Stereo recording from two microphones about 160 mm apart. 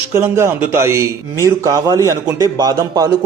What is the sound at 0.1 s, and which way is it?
A man's voice, 15° right (ahead or behind).